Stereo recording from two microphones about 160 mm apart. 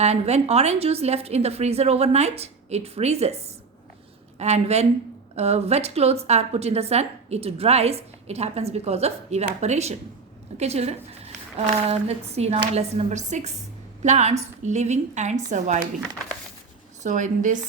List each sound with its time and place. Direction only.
0.0 s a woman's voice: 40° right (ahead or behind)
17.0 s a woman's voice: 50° right (ahead or behind)